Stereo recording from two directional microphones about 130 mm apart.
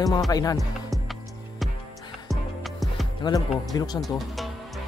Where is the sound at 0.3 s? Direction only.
30° left (ahead or behind).